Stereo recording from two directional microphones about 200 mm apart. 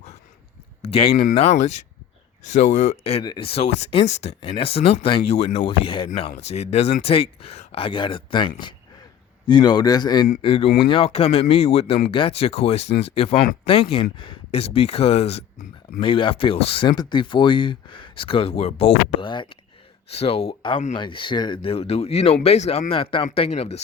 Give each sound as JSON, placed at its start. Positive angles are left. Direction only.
{"t": 0.8, "sound": "speech", "side_deg": 30}